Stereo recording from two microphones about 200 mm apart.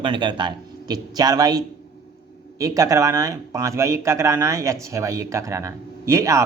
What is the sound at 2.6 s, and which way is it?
A man's voice, 15° right (ahead or behind).